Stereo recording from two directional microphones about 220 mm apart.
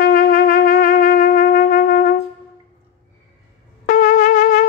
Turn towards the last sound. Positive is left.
turn(degrees=35)  # may be behind; listen again after turning